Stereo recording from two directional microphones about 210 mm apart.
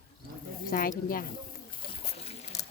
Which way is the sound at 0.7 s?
45° left (ahead or behind).